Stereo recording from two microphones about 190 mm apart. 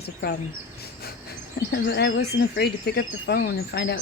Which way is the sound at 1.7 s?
60° left (ahead or behind).